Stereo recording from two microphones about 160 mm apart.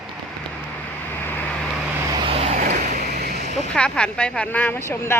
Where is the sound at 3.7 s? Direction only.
5° left (ahead or behind).